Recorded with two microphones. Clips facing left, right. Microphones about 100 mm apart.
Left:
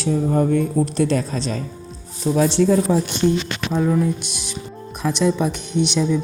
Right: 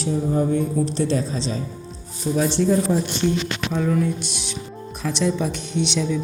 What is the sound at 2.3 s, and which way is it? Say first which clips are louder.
Speech: left 3 dB; 50° left (ahead or behind).